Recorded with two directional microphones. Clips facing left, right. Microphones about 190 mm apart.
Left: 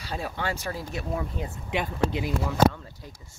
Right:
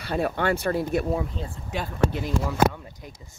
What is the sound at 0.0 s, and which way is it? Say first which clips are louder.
Speech: right 7 dB; 60° right (ahead or behind).